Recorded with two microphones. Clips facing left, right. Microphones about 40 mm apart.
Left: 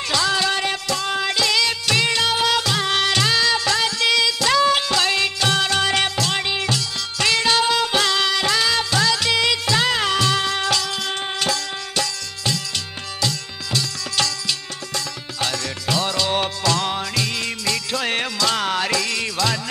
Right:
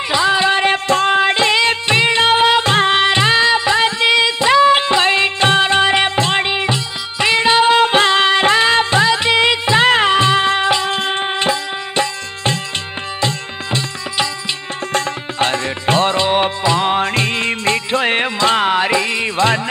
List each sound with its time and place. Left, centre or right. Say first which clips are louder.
0.1 s music: right 6 dB; right
14.9 s music: right 10 dB; right